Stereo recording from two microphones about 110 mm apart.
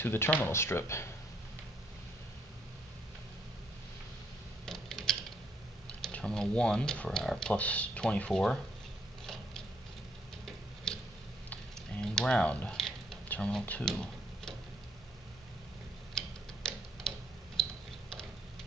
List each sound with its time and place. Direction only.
0.0 s speech: 20° left (ahead or behind)
4.6 s typing: 5° left (ahead or behind)
5.9 s speech: 10° left (ahead or behind)
9.2 s mechanisms: 5° left (ahead or behind)
10.9 s a sound: 5° left (ahead or behind)
16.2 s tick-tock: 5° left (ahead or behind)
17.6 s typing: 5° left (ahead or behind)